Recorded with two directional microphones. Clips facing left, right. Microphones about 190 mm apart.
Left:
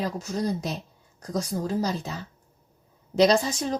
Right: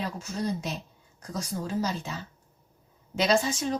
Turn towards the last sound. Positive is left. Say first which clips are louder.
# left 4 dB
turn(degrees=35)  # may be behind; listen again after turning